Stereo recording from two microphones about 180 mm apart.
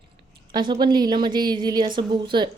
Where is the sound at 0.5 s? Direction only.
25° right (ahead or behind).